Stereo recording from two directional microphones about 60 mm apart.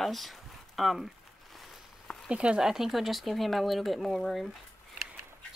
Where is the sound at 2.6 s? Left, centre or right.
Centre.